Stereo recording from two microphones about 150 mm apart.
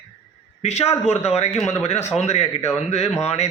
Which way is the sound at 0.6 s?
45° left (ahead or behind).